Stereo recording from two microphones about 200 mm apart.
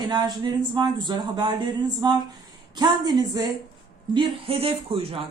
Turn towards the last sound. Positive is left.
turn(degrees=-30)  # may be behind; listen again after turning